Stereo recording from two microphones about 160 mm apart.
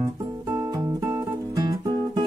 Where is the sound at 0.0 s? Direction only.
20° right (ahead or behind).